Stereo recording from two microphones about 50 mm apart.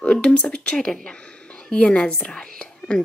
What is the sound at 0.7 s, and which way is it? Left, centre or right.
A woman's voice, centre.